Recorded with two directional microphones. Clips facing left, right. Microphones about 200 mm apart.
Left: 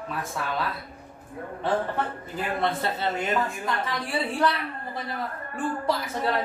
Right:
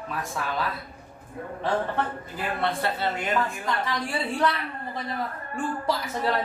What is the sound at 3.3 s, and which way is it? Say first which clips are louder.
A woman's voice: even; centre (ahead or behind).